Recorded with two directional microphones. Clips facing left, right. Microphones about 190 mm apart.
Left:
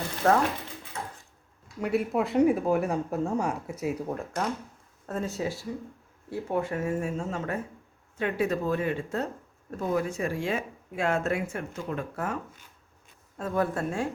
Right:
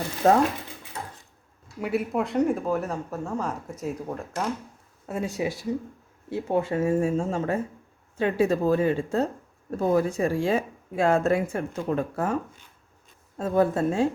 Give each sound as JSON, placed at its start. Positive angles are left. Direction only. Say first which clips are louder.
{"t": 0.2, "sound": "speech", "louder": "right 3 dB", "side_deg": -20}
{"t": 1.8, "sound": "speech", "louder": "even", "side_deg": 0}
{"t": 5.0, "sound": "speech", "louder": "right 3 dB", "side_deg": -10}
{"t": 6.3, "sound": "speech", "louder": "right 4 dB", "side_deg": -25}